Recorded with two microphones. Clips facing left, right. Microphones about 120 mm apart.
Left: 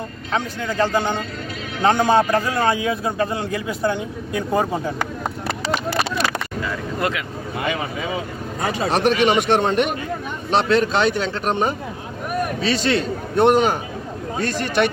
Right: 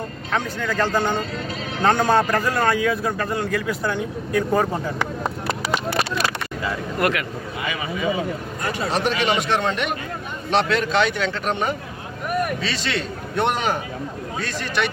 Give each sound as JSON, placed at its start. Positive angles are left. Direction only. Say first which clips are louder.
{"t": 0.3, "sound": "a man's voice", "louder": "left 1 dB", "side_deg": 15}
{"t": 1.8, "sound": "a man's voice", "louder": "left 2 dB", "side_deg": 15}
{"t": 7.6, "sound": "a man's voice", "louder": "left 5 dB", "side_deg": 60}
{"t": 8.9, "sound": "a man's voice", "louder": "left 5 dB", "side_deg": 60}
{"t": 10.5, "sound": "a man's voice", "louder": "left 2 dB", "side_deg": 35}